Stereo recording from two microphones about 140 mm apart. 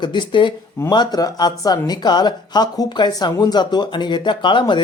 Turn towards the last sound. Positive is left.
turn(degrees=35)  # may be behind; listen again after turning